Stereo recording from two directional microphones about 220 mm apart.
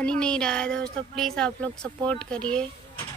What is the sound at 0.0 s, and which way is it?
Speech, 5° left (ahead or behind).